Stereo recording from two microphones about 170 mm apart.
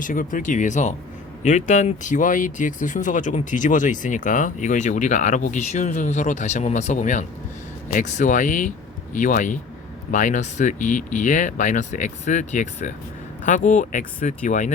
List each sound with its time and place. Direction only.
0.0 s speech: 50° left (ahead or behind)